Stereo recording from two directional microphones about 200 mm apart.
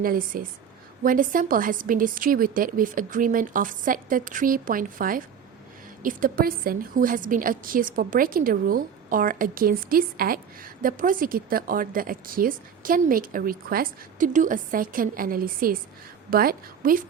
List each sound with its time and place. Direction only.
0.0 s a woman's voice: 45° right (ahead or behind)